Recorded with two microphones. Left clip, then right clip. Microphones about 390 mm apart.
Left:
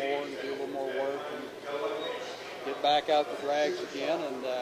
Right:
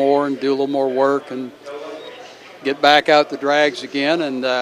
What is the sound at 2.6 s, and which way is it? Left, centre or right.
Speech, right.